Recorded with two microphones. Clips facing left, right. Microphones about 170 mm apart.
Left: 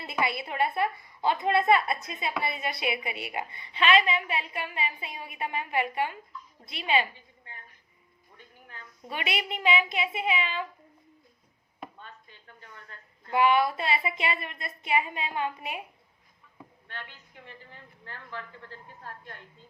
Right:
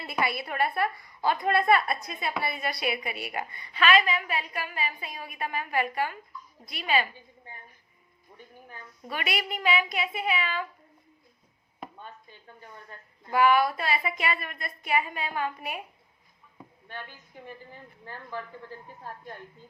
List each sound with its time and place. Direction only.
0.1 s a woman's voice: 20° left (ahead or behind)
9.0 s a woman's voice: 25° left (ahead or behind)
12.5 s a sound: 15° right (ahead or behind)
13.3 s a woman's voice: 25° left (ahead or behind)
16.9 s a woman's voice: 10° right (ahead or behind)